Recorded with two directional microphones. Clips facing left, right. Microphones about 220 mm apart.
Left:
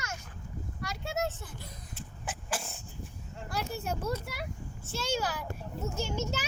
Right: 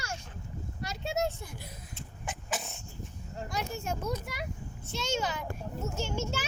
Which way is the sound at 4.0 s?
5° left (ahead or behind).